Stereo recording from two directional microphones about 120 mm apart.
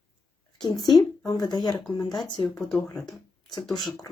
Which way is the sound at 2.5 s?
5° left (ahead or behind).